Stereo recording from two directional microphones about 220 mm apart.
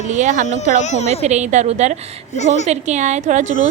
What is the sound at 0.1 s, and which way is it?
Speech, 35° right (ahead or behind).